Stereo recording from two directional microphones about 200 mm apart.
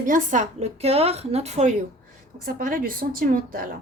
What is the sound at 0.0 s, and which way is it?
A woman's voice, 40° right (ahead or behind).